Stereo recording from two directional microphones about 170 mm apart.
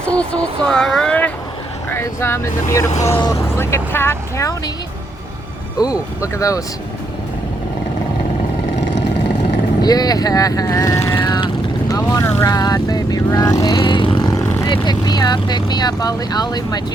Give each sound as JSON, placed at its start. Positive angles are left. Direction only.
{"t": 0.0, "sound": "speech", "side_deg": 5}
{"t": 9.8, "sound": "speech", "side_deg": 20}
{"t": 11.2, "sound": "vehicle", "side_deg": 25}
{"t": 11.9, "sound": "speech", "side_deg": 15}